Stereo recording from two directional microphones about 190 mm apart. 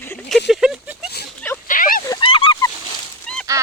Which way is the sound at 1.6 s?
45° left (ahead or behind).